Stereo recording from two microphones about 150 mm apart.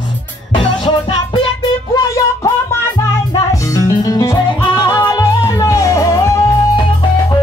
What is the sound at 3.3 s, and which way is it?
Music, 20° left (ahead or behind).